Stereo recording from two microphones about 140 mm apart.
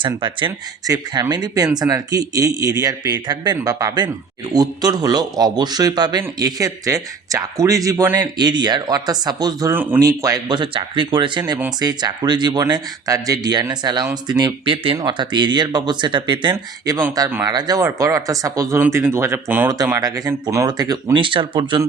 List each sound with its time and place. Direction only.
0.0 s speech: 35° right (ahead or behind); by 19.7 s 15° right (ahead or behind)
20.0 s speech: 25° right (ahead or behind)